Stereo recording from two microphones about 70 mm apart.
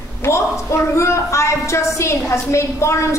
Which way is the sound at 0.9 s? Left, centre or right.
Left.